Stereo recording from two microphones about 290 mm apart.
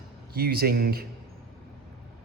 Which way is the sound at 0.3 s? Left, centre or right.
Right.